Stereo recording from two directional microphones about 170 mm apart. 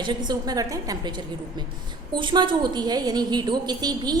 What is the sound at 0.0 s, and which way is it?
A woman's voice, 25° right (ahead or behind).